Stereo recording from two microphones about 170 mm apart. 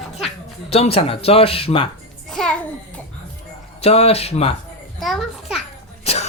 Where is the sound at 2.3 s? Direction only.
5° left (ahead or behind).